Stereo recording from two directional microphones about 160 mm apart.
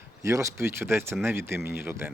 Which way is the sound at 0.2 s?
20° right (ahead or behind).